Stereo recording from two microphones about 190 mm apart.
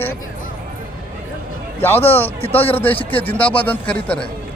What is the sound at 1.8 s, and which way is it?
Speech, 10° left (ahead or behind).